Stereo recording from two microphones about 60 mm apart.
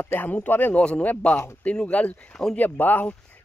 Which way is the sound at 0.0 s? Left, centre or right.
Left.